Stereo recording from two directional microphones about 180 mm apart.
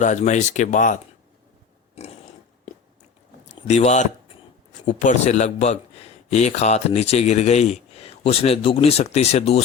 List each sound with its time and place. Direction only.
0.0 s speech: 45° left (ahead or behind)
3.7 s a man's voice: 40° left (ahead or behind)